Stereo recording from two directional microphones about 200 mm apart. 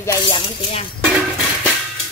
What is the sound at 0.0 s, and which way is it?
Speech, 25° left (ahead or behind).